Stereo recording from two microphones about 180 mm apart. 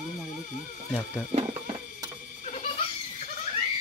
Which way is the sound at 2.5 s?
40° left (ahead or behind).